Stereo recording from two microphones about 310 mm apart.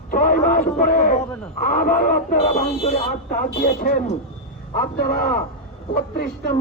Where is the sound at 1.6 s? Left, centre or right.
Left.